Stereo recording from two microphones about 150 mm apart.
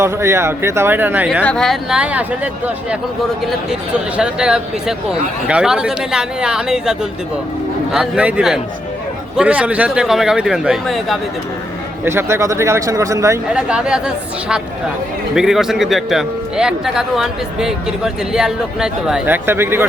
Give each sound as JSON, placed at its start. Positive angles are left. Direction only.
{"t": 0.0, "sound": "speech", "side_deg": -15}
{"t": 1.5, "sound": "speech", "side_deg": 5}
{"t": 4.2, "sound": "speech", "side_deg": -5}
{"t": 12.0, "sound": "speech", "side_deg": -15}
{"t": 13.5, "sound": "speech", "side_deg": -5}